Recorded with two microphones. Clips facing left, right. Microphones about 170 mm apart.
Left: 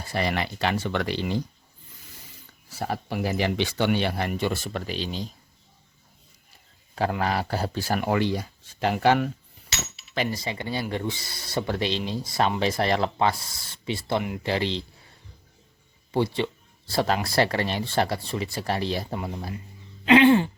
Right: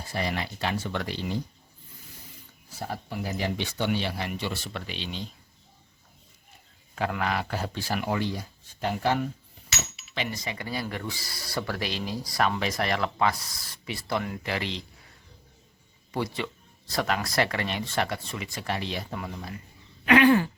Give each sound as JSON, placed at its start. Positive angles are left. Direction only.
{"t": 0.1, "sound": "speech", "side_deg": 75}
{"t": 2.6, "sound": "speech", "side_deg": 85}
{"t": 6.9, "sound": "speech", "side_deg": 35}
{"t": 8.1, "sound": "speech", "side_deg": 85}
{"t": 9.9, "sound": "speech", "side_deg": 35}
{"t": 14.4, "sound": "speech", "side_deg": 30}
{"t": 16.1, "sound": "speech", "side_deg": 30}